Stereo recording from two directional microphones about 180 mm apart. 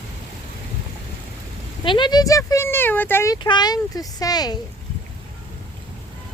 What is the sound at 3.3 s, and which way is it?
Speech, 25° left (ahead or behind).